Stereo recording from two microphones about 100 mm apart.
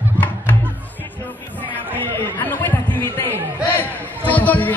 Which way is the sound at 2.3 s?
20° left (ahead or behind).